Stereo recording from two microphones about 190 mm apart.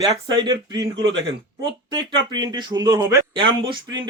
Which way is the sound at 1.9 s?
20° right (ahead or behind).